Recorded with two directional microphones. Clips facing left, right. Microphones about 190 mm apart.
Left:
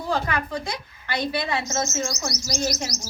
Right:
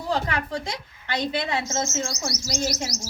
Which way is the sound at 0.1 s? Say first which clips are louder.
Even; 25° right (ahead or behind).